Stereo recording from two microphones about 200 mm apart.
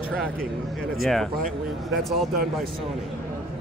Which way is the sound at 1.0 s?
Centre (ahead or behind).